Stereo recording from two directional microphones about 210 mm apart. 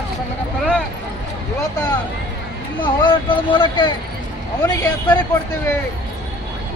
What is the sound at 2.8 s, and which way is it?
Speech, 20° left (ahead or behind).